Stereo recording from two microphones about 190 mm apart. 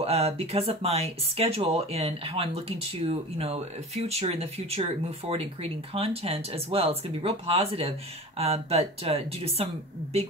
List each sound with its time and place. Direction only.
0.0 s speech: 30° right (ahead or behind)